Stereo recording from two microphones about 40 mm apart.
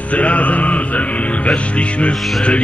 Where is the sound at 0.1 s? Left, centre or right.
Left.